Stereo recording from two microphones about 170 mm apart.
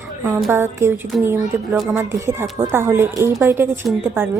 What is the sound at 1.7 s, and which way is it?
Speech, centre (ahead or behind).